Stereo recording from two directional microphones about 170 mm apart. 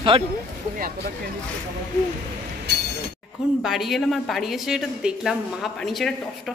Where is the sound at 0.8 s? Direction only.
60° right (ahead or behind).